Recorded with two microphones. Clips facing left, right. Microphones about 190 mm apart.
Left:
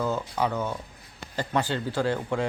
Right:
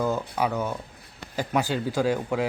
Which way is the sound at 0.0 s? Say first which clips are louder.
Right 1 dB; 10° right (ahead or behind).